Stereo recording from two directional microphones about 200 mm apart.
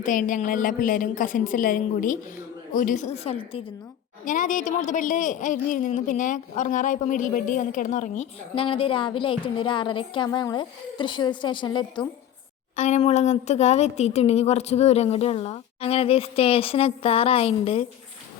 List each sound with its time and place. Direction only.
0.0 s a woman's voice: 40° left (ahead or behind)
4.3 s a woman's voice: 40° left (ahead or behind); by 12.0 s 25° left (ahead or behind)
12.7 s a woman's voice: 35° left (ahead or behind)